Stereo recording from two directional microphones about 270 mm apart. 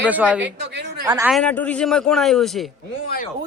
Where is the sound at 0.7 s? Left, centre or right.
Right.